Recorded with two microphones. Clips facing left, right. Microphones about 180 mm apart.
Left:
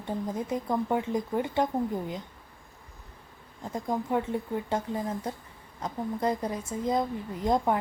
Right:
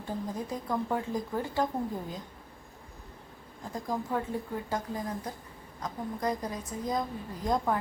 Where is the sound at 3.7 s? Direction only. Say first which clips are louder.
Left 4 dB; 20° left (ahead or behind).